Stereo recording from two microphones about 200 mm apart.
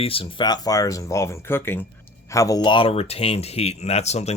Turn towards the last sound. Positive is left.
turn(degrees=35)  # may be behind; listen again after turning